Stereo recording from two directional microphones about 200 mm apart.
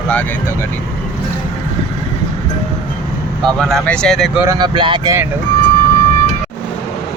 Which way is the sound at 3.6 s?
Centre (ahead or behind).